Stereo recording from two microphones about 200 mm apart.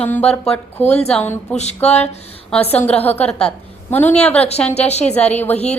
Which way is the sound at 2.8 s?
10° left (ahead or behind).